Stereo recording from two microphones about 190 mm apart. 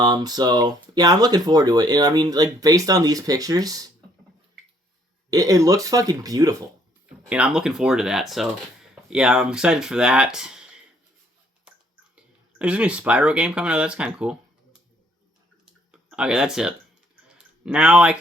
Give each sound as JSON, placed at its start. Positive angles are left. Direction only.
{"t": 0.0, "sound": "speech", "side_deg": -20}
{"t": 5.3, "sound": "speech", "side_deg": -20}
{"t": 7.3, "sound": "speech", "side_deg": -5}
{"t": 12.1, "sound": "speech", "side_deg": -5}
{"t": 15.6, "sound": "clicking", "side_deg": -5}
{"t": 17.2, "sound": "a sound", "side_deg": -5}